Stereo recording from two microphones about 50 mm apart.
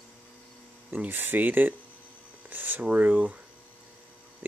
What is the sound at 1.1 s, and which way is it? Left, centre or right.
Speech, right.